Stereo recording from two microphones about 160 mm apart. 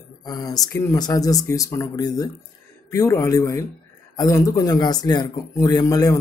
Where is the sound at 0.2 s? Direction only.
25° left (ahead or behind).